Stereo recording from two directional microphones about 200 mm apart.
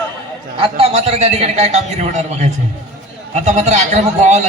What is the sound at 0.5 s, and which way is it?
A man's voice, 30° right (ahead or behind).